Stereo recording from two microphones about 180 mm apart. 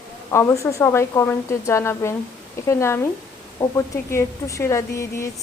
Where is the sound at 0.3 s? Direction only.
15° left (ahead or behind).